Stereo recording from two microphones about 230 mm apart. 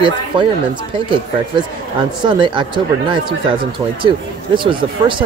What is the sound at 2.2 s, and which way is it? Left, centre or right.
Speech, right.